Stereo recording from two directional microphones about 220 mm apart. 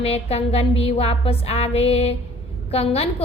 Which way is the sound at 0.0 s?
25° left (ahead or behind).